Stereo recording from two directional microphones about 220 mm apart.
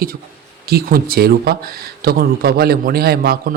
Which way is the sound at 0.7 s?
45° right (ahead or behind).